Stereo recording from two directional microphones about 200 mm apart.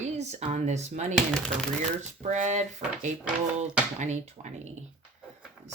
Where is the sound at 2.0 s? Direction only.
35° right (ahead or behind).